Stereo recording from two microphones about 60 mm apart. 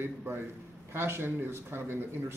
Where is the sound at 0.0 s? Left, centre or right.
Right.